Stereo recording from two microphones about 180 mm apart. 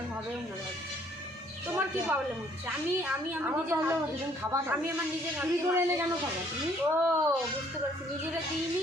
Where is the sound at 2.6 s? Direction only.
10° right (ahead or behind).